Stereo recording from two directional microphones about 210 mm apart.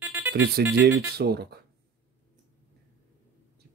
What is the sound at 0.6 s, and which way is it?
Speech, 50° right (ahead or behind).